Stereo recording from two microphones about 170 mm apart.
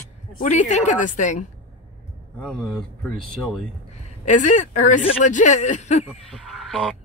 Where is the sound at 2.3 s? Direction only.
5° left (ahead or behind).